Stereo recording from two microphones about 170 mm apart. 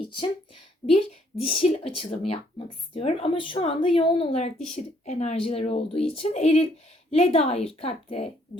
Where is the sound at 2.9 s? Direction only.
35° left (ahead or behind).